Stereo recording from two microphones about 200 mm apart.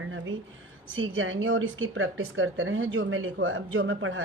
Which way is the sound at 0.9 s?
80° right.